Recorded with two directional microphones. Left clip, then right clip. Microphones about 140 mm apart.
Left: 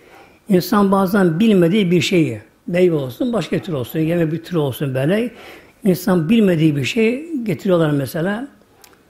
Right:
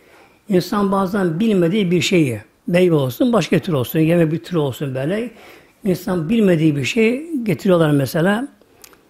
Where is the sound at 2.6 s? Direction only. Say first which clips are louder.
Right 1 dB; 35° right (ahead or behind).